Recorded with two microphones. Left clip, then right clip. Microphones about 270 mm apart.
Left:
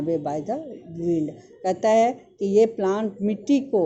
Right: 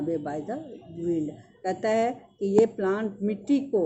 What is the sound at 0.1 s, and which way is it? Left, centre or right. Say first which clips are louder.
Speech: left 8 dB; centre.